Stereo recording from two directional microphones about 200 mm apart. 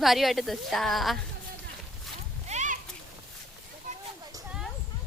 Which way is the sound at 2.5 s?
35° right (ahead or behind).